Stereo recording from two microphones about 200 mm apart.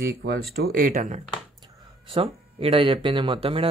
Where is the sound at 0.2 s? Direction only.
50° right (ahead or behind).